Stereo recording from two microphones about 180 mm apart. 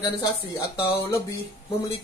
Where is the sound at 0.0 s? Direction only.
20° left (ahead or behind).